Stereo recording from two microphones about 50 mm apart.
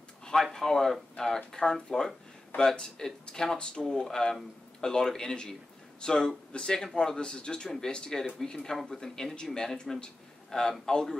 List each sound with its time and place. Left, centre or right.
0.4 s speech: centre